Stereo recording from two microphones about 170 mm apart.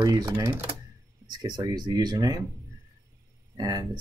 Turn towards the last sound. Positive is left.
turn(degrees=-20)  # may be behind; listen again after turning